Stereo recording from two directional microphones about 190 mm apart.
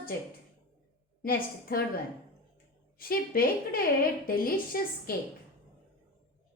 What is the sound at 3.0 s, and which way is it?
A woman's voice, 50° left (ahead or behind).